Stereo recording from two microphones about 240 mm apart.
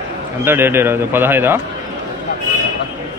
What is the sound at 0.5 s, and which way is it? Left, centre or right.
Speech, centre.